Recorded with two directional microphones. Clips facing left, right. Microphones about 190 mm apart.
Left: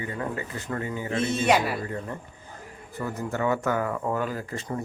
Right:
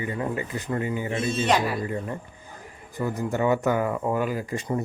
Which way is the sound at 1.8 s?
15° right (ahead or behind).